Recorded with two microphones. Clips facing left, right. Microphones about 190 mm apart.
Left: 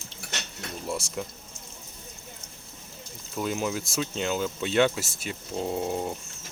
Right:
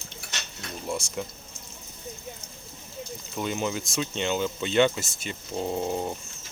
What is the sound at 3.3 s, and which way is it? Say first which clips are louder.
Speech: left 1 dB; centre (ahead or behind).